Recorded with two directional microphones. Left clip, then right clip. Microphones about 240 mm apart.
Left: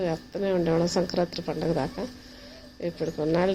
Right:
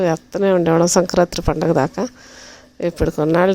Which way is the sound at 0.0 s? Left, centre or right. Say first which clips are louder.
Right 11 dB; right.